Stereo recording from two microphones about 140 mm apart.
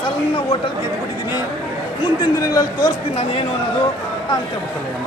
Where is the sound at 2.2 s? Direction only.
30° left (ahead or behind).